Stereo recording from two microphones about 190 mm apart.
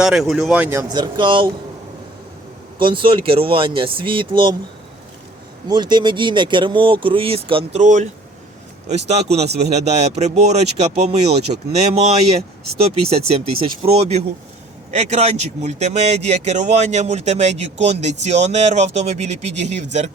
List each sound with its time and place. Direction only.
0.0 s speech: centre (ahead or behind); by 1.5 s 25° right (ahead or behind)
2.8 s speech: 25° right (ahead or behind)
5.6 s speech: 25° right (ahead or behind)